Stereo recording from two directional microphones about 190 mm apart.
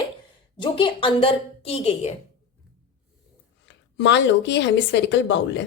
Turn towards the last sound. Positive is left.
turn(degrees=70)  # may be behind; listen again after turning